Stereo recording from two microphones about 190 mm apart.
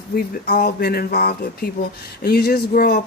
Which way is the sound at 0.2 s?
55° left (ahead or behind).